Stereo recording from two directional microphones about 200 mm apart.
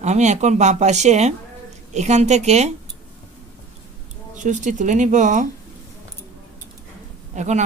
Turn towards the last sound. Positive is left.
turn(degrees=-35)  # may be behind; listen again after turning